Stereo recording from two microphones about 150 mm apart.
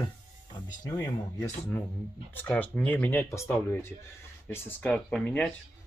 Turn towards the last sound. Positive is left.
turn(degrees=5)  # may be behind; listen again after turning